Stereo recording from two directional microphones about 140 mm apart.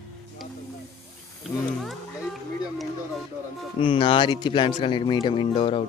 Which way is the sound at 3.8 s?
40° left (ahead or behind).